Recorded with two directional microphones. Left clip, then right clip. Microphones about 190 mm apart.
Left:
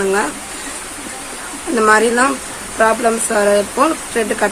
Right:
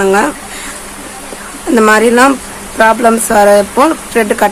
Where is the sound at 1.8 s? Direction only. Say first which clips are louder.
Right 5 dB; 30° right (ahead or behind).